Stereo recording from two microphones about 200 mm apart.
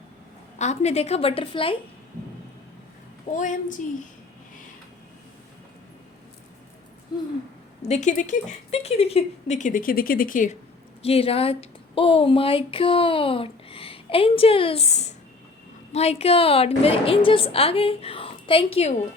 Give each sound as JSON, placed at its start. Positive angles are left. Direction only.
{"t": 0.6, "sound": "speech", "side_deg": 35}
{"t": 3.3, "sound": "speech", "side_deg": 40}
{"t": 7.8, "sound": "speech", "side_deg": 35}